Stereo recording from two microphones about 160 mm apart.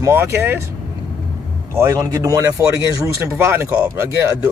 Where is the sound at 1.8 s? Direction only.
15° right (ahead or behind).